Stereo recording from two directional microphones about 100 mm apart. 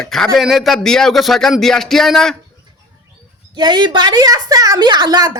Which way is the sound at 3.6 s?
45° right (ahead or behind).